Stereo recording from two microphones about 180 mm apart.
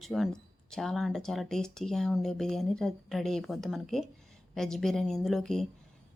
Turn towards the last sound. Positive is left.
turn(degrees=0)  # may be behind; listen again after turning